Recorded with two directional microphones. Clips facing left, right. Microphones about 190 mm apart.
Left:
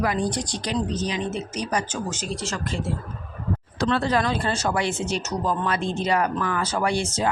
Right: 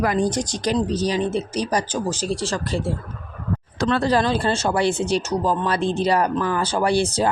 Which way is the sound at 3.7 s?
45° right (ahead or behind).